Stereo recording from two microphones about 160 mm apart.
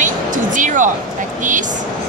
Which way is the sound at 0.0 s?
55° right (ahead or behind).